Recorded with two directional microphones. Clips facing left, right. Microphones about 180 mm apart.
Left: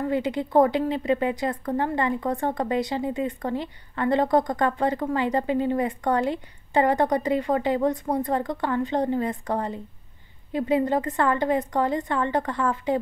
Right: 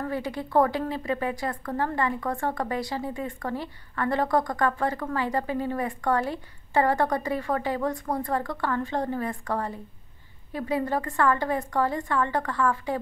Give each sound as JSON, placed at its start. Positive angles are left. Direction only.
{"t": 0.0, "sound": "a woman's voice", "side_deg": 20}